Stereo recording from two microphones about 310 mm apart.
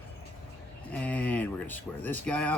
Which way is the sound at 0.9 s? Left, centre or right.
Centre.